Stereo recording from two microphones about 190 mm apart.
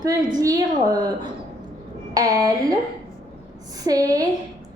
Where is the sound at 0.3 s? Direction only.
20° right (ahead or behind).